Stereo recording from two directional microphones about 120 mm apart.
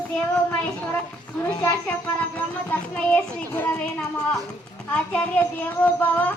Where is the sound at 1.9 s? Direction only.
15° left (ahead or behind).